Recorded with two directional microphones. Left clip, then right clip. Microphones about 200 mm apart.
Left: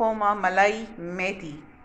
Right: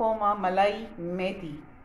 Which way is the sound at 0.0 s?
15° left (ahead or behind).